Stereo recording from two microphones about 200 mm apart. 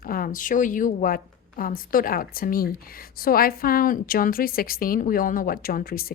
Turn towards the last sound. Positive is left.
turn(degrees=45)  # may be behind; listen again after turning